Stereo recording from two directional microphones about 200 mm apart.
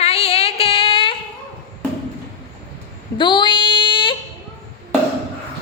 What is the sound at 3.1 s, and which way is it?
Child singing, 25° left (ahead or behind).